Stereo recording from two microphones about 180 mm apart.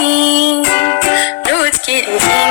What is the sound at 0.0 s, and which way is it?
Music, 90° left.